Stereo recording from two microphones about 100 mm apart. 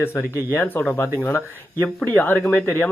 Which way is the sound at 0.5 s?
20° left (ahead or behind).